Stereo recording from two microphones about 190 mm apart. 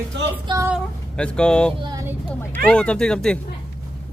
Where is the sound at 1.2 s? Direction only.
5° left (ahead or behind).